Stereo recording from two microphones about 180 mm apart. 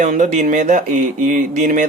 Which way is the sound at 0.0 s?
45° right (ahead or behind).